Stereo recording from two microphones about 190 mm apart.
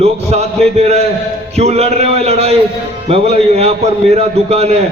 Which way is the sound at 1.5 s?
35° right (ahead or behind).